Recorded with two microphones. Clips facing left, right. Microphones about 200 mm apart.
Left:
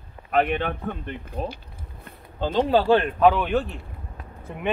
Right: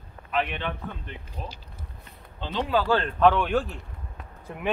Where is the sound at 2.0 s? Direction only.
45° left (ahead or behind).